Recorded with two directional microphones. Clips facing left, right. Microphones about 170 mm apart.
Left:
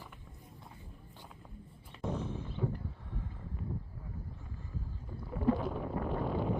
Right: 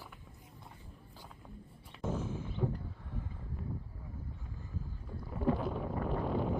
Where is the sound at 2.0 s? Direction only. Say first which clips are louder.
Even; 5° right (ahead or behind).